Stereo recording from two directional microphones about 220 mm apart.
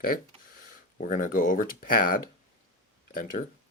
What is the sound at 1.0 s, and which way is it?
Speech, 35° left (ahead or behind).